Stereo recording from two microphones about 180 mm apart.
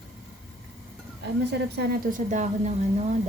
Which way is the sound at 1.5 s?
60° right (ahead or behind).